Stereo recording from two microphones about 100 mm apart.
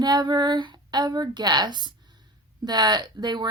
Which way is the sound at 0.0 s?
45° right (ahead or behind).